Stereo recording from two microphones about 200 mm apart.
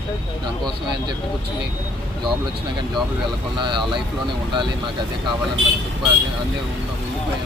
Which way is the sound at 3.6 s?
25° right (ahead or behind).